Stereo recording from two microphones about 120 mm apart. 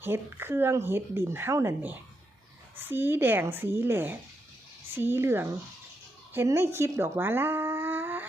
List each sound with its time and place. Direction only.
0.0 s speech: 20° right (ahead or behind)